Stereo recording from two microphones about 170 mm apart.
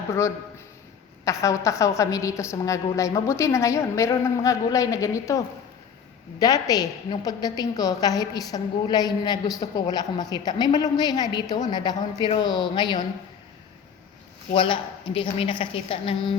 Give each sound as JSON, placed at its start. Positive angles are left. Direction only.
{"t": 0.1, "sound": "a woman's voice", "side_deg": 15}
{"t": 6.4, "sound": "a woman's voice", "side_deg": 20}
{"t": 14.5, "sound": "a woman's voice", "side_deg": 30}